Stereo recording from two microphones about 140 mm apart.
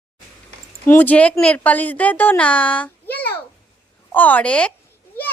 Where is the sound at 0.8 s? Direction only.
15° left (ahead or behind).